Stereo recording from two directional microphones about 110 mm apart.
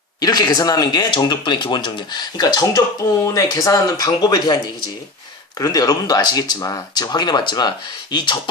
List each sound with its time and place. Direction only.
0.2 s speech: 35° left (ahead or behind)